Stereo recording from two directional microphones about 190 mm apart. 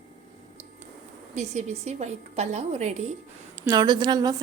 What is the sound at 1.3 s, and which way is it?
A woman's voice, 35° right (ahead or behind).